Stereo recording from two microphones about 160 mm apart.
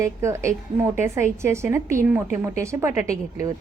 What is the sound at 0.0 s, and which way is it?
A woman's voice, 15° right (ahead or behind).